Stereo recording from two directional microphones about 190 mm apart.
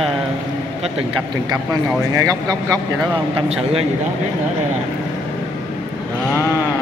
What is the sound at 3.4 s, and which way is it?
Speech, 30° right (ahead or behind).